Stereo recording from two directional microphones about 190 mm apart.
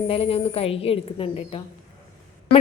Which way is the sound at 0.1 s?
30° left (ahead or behind).